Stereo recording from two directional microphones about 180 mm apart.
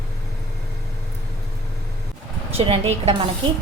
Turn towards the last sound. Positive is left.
turn(degrees=-35)  # may be behind; listen again after turning